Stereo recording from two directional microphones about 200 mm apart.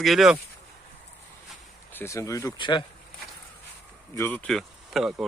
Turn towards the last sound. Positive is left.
turn(degrees=0)  # may be behind; listen again after turning